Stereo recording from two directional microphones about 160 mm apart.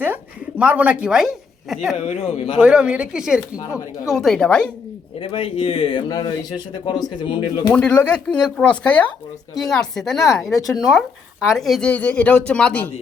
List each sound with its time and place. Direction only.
0.6 s a woman's voice: 10° right (ahead or behind)
2.0 s speech: 45° left (ahead or behind)
2.6 s a woman's voice: 5° right (ahead or behind)
5.2 s speech: 35° left (ahead or behind)
7.7 s a woman's voice: 10° left (ahead or behind)